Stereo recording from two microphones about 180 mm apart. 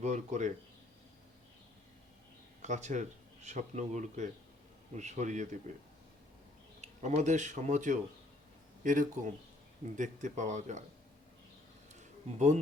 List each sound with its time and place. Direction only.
0.0 s speech: 40° right (ahead or behind)
2.6 s speech: 40° right (ahead or behind)
6.8 s speech: 40° right (ahead or behind)
11.9 s a sound: 40° right (ahead or behind)